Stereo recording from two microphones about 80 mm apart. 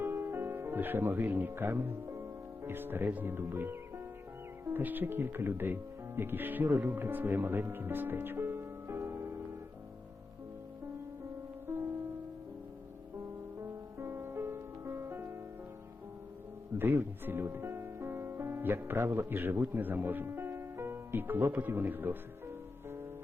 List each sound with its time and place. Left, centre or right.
0.0 s music: right
2.6 s speech: right
13.6 s music: right
16.7 s speech: right